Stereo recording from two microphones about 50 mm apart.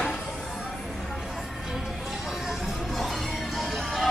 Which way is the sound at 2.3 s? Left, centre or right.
Centre.